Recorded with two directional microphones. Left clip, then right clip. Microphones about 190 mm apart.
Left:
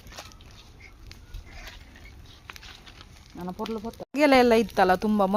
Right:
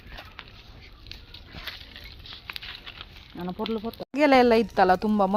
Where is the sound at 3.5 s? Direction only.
35° right (ahead or behind).